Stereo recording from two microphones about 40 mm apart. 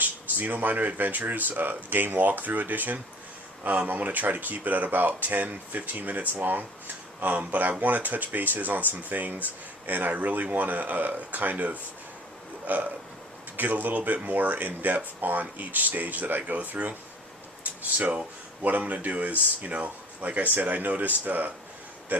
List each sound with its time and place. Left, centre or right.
0.0 s speech: right
12.6 s hiccup: right
13.6 s speech: right
18.6 s speech: right
22.1 s a sound: right